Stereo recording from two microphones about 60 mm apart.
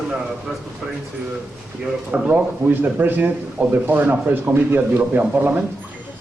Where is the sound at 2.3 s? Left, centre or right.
Right.